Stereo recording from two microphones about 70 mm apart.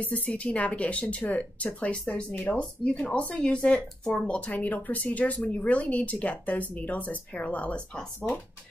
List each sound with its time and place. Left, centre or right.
0.0 s speech: left
4.5 s speech: left